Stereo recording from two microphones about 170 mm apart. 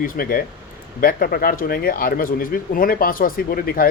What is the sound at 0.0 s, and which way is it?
Speech, 60° left (ahead or behind).